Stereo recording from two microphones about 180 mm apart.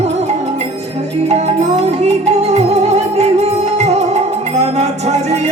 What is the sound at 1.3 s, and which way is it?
Music, 35° right (ahead or behind).